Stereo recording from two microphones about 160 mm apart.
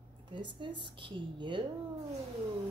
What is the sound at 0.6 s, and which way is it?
A woman's voice, 30° right (ahead or behind).